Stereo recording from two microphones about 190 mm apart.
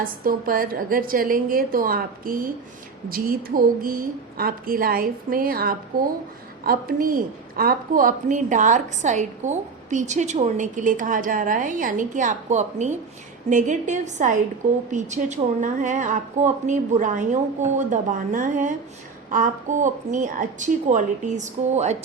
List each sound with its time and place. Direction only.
0.0 s a woman's voice: 50° right (ahead or behind)